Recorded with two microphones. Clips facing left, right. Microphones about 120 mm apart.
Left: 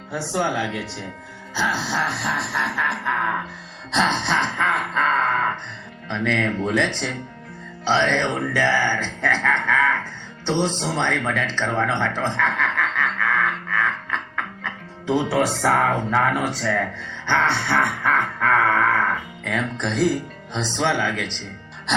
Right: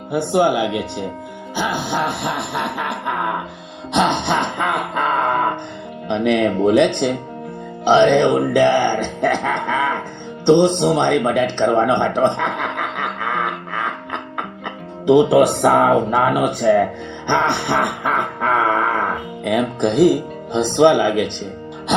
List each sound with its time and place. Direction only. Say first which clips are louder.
0.1 s speech: right 8 dB; 60° right (ahead or behind)
0.4 s speech: right 7 dB; 20° right (ahead or behind)
2.0 s speech: right 3 dB; 55° right (ahead or behind)
3.1 s speech: right 3 dB; 20° right (ahead or behind)
3.9 s music: right 4 dB; 20° right (ahead or behind)
6.1 s speech: right 7 dB; 20° right (ahead or behind)
13.7 s music: even; 20° right (ahead or behind)
16.0 s speech: right 5 dB; 20° right (ahead or behind)
19.6 s speech: right 8 dB; 55° right (ahead or behind)